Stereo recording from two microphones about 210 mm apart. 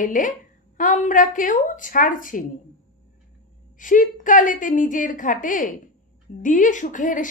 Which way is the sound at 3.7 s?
40° left (ahead or behind).